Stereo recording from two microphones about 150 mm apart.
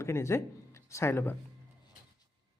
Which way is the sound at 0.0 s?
20° left (ahead or behind).